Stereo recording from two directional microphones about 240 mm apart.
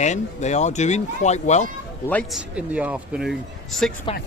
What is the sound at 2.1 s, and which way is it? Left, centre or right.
Speech, centre.